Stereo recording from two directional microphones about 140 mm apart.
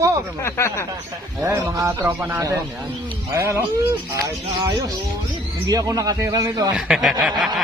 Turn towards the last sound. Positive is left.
turn(degrees=-5)  # may be behind; listen again after turning